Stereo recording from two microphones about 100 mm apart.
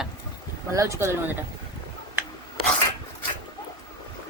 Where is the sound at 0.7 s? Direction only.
30° right (ahead or behind).